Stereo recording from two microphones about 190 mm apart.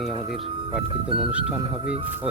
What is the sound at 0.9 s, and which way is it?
Speech, 30° right (ahead or behind).